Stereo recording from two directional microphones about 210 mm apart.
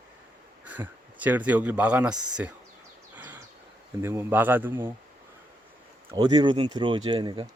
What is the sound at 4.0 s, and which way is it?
Speech, 10° right (ahead or behind).